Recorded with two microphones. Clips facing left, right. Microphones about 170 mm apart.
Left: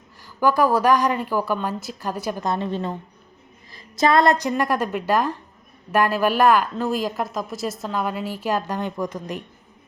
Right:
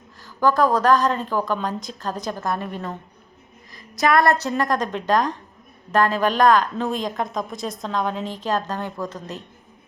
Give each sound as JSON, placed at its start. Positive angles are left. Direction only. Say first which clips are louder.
{"t": 0.2, "sound": "speech", "louder": "even", "side_deg": 10}
{"t": 2.5, "sound": "a woman's voice", "louder": "left 3 dB", "side_deg": 25}